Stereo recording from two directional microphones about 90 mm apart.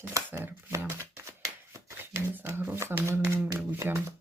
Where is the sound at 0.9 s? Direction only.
30° right (ahead or behind).